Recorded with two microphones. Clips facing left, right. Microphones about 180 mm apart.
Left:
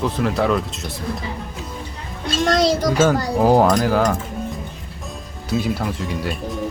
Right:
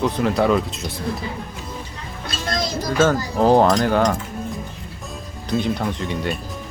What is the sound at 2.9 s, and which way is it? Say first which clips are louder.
Speech: left 1 dB; 10° left (ahead or behind).